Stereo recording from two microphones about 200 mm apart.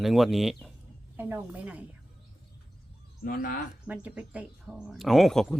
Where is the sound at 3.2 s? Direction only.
45° left (ahead or behind).